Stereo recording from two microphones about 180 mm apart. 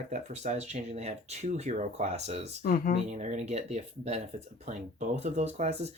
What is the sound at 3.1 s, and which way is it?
Speech, 40° right (ahead or behind).